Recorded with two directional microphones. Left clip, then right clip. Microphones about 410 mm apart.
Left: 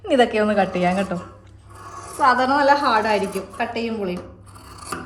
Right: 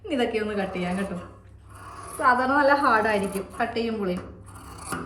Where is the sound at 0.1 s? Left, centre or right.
Centre.